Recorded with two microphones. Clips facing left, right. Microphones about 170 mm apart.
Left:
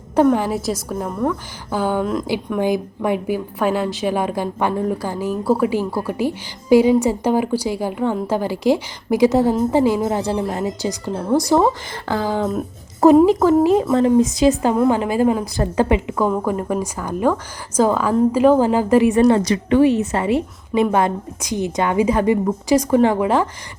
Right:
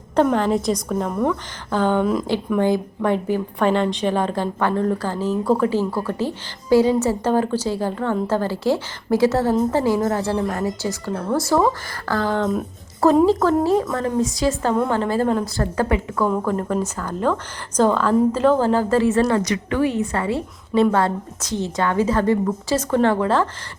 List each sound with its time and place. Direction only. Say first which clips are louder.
0.3 s a woman's voice: right 2 dB; 5° left (ahead or behind)
2.6 s a woman's voice: even; 10° left (ahead or behind)